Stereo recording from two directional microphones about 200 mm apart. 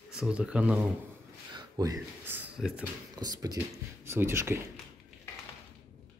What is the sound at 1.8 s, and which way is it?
Speech, 15° right (ahead or behind).